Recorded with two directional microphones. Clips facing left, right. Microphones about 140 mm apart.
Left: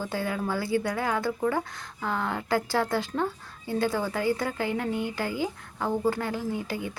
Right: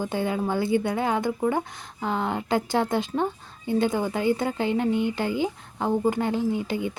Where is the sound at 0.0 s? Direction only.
20° right (ahead or behind).